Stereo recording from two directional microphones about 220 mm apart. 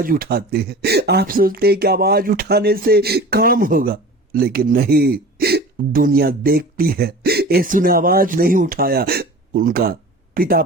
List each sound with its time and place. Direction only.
0.0 s speech: 40° right (ahead or behind)